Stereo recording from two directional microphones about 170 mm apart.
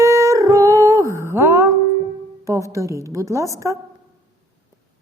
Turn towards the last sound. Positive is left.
turn(degrees=-20)  # may be behind; listen again after turning